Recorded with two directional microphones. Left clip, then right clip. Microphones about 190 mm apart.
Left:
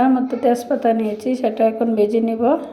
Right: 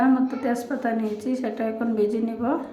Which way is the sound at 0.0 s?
15° left (ahead or behind).